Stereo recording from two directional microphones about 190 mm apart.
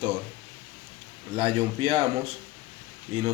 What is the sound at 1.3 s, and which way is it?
Speech, 30° right (ahead or behind).